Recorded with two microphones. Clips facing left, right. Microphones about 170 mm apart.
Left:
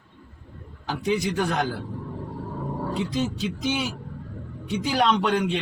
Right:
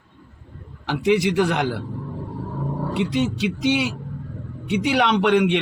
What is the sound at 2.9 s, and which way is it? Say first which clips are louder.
Speech: right 5 dB; 75° right (ahead or behind).